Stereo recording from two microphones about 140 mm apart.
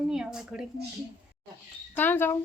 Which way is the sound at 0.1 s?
5° right (ahead or behind).